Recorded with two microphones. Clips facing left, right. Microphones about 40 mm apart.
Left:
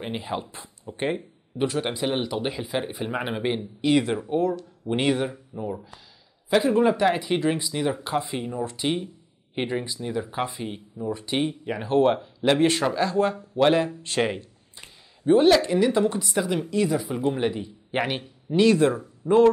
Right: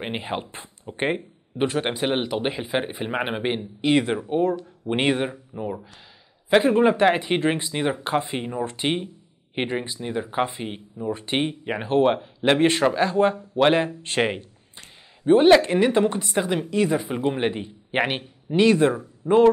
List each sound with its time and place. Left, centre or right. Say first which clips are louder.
0.0 s speech: right 1 dB; right